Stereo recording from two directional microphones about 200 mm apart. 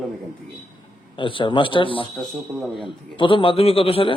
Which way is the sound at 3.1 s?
25° left (ahead or behind).